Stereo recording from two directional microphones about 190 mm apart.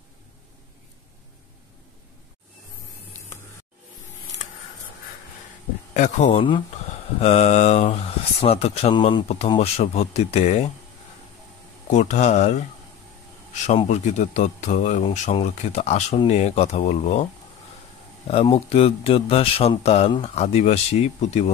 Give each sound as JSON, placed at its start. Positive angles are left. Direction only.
{"t": 5.9, "sound": "speech", "side_deg": 40}
{"t": 11.9, "sound": "speech", "side_deg": 35}
{"t": 13.7, "sound": "speech", "side_deg": 35}